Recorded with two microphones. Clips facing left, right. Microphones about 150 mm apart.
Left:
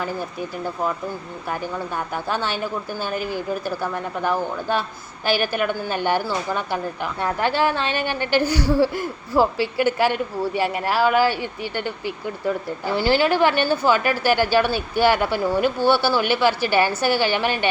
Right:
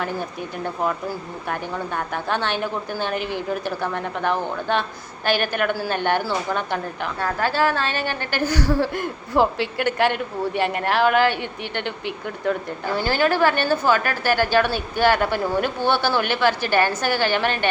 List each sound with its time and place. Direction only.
2.1 s a woman's voice: 10° left (ahead or behind)
3.2 s a woman's voice: 65° right (ahead or behind)
3.8 s a woman's voice: 5° left (ahead or behind)
12.9 s a woman's voice: 15° left (ahead or behind)